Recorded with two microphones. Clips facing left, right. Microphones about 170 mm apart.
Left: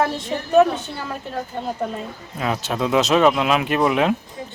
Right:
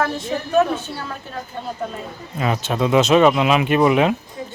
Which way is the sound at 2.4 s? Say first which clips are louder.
Right 2 dB; centre (ahead or behind).